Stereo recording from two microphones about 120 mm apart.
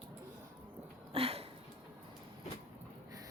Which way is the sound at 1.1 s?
55° right (ahead or behind).